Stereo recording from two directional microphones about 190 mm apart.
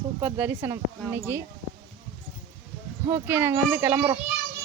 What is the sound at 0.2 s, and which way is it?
Speech, 10° right (ahead or behind).